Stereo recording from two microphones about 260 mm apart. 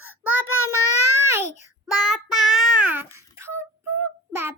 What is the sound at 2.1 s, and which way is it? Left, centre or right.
Child singing, centre.